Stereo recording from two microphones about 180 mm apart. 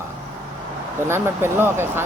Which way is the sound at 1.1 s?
15° right (ahead or behind).